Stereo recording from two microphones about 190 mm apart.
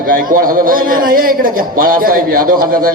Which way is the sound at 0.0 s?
50° right (ahead or behind).